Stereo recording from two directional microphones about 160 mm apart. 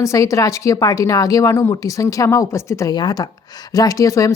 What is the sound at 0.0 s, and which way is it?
A woman's voice, 20° left (ahead or behind).